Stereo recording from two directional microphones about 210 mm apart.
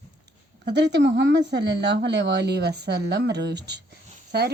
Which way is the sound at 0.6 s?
55° right (ahead or behind).